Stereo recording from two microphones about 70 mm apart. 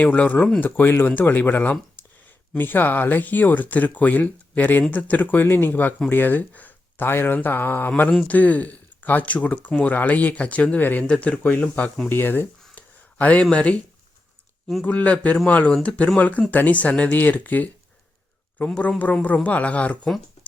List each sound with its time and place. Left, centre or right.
0.0 s speech: left
11.0 s speech: centre
14.8 s speech: left
18.8 s speech: left